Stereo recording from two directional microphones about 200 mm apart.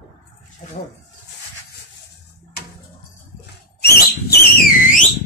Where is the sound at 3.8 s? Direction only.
50° left (ahead or behind).